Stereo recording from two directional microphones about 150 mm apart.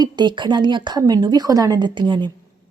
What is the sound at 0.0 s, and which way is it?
A woman's voice, 30° right (ahead or behind).